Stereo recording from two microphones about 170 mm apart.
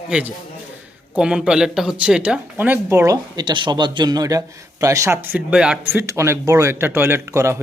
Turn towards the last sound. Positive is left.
turn(degrees=-15)  # may be behind; listen again after turning